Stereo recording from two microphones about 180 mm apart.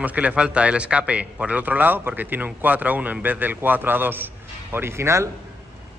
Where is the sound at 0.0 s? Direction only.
10° right (ahead or behind).